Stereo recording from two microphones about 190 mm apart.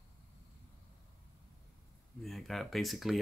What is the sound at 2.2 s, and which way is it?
Speech, centre (ahead or behind).